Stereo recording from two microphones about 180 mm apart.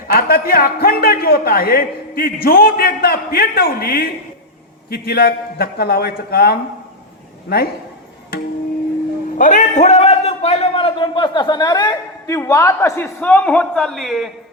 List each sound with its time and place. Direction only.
0.1 s a man's voice: 55° left (ahead or behind)
9.4 s a man's voice: 45° left (ahead or behind); by 14.3 s centre (ahead or behind)